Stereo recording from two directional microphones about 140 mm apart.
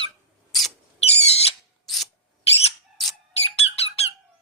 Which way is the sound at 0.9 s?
45° left (ahead or behind).